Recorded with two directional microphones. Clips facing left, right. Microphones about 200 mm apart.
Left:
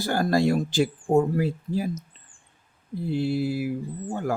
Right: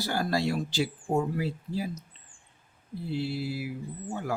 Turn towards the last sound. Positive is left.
turn(degrees=50)  # may be behind; listen again after turning